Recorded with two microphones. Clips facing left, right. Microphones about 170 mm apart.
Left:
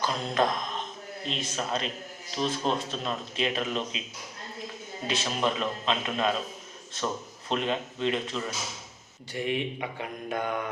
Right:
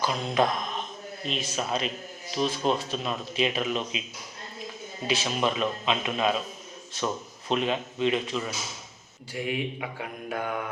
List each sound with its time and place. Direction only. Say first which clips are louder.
0.0 s mantra: right 2 dB; 15° right (ahead or behind)
1.3 s speech: right 2 dB; 15° right (ahead or behind)
5.0 s speech: right 2 dB; 10° right (ahead or behind)
7.4 s speech: right 2 dB; 15° right (ahead or behind)
9.3 s mantra: left 1 dB; 5° right (ahead or behind)